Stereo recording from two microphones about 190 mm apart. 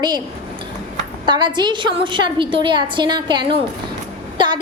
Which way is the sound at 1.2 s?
25° right (ahead or behind).